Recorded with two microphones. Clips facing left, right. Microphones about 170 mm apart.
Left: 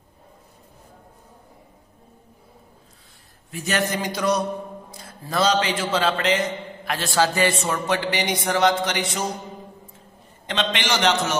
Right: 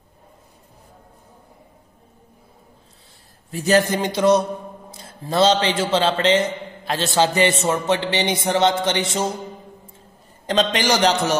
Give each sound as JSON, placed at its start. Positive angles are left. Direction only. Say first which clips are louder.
{"t": 3.5, "sound": "a man's voice", "louder": "right 7 dB", "side_deg": -35}
{"t": 10.4, "sound": "a man's voice", "louder": "right 6 dB", "side_deg": -40}